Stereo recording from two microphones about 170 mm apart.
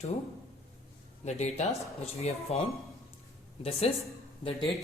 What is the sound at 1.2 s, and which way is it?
A woman's voice, 40° left (ahead or behind).